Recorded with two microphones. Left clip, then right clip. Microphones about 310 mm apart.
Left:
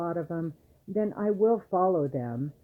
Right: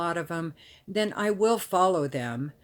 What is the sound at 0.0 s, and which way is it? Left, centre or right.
Speech, right.